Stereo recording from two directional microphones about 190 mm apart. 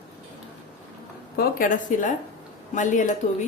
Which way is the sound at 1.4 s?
45° left (ahead or behind).